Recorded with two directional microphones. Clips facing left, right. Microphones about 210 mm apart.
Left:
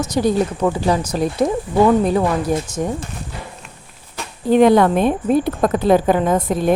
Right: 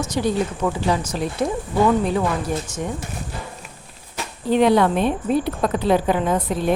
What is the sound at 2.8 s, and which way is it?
Speech, 45° left (ahead or behind).